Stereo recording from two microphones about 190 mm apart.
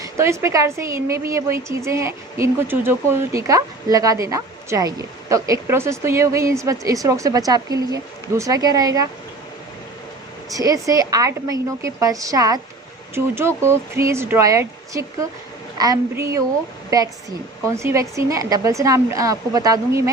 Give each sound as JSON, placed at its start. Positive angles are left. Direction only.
{"t": 0.0, "sound": "a woman's voice", "side_deg": -15}
{"t": 10.5, "sound": "a woman's voice", "side_deg": -20}